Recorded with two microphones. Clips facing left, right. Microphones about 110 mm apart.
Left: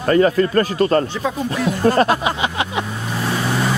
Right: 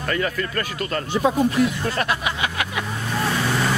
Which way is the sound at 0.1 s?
35° left (ahead or behind).